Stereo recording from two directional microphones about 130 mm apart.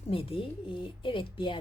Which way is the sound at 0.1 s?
45° left (ahead or behind).